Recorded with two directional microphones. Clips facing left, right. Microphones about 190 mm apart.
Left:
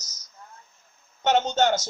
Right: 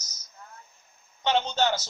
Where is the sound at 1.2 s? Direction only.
50° left (ahead or behind).